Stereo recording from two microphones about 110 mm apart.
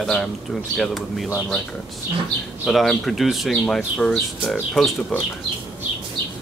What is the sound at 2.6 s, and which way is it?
Speech, centre (ahead or behind).